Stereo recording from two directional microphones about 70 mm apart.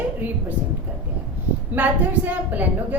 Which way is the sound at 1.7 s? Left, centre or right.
Right.